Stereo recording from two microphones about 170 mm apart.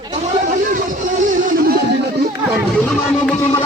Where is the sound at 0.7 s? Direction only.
50° right (ahead or behind).